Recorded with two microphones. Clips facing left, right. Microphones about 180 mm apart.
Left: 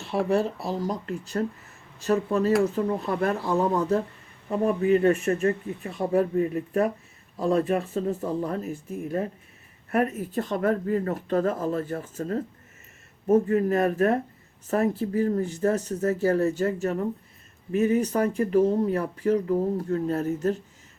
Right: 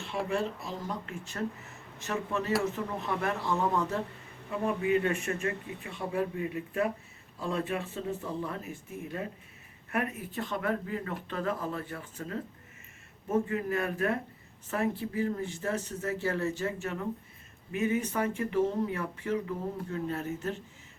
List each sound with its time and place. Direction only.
0.0 s speech: 40° left (ahead or behind)